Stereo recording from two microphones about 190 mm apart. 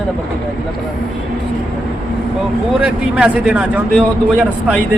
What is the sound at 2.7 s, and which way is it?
Speech, 5° right (ahead or behind).